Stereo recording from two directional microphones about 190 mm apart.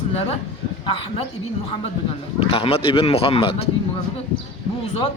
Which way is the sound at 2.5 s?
30° left (ahead or behind).